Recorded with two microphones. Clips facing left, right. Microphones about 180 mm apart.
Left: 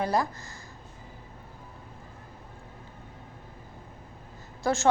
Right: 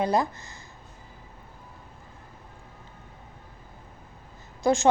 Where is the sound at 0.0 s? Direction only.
20° right (ahead or behind).